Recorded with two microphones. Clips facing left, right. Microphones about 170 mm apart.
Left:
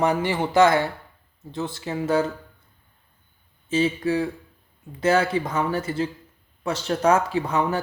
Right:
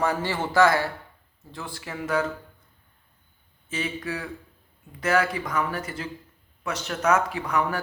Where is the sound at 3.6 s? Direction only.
30° left (ahead or behind).